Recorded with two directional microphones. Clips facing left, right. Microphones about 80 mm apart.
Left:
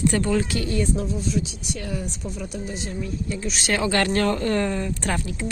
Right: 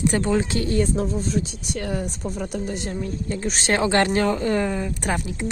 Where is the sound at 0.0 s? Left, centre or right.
Right.